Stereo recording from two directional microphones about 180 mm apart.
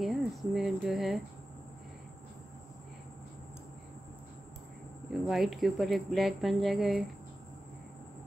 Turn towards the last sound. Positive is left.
turn(degrees=0)  # may be behind; listen again after turning